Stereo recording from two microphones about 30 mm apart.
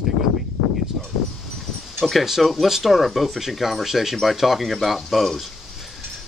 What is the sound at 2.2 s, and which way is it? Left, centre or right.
Speech, centre.